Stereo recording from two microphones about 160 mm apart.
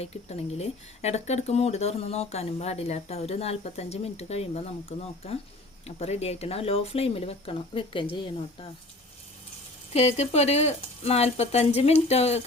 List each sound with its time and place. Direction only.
0.0 s speech: 40° left (ahead or behind)
9.9 s speech: 40° left (ahead or behind)